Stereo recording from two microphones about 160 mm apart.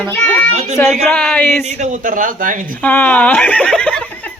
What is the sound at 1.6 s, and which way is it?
Speech, 45° right (ahead or behind).